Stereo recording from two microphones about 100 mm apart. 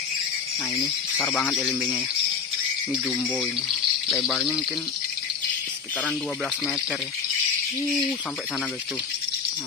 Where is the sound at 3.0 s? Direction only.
10° left (ahead or behind).